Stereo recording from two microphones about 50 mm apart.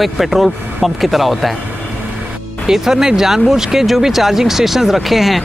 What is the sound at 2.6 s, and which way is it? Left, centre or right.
Speech, centre.